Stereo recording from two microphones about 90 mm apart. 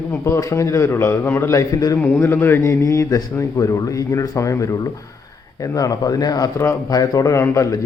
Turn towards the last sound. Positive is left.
turn(degrees=35)  # may be behind; listen again after turning